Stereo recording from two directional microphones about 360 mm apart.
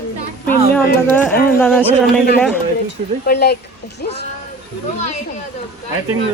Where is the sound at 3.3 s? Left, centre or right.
Left.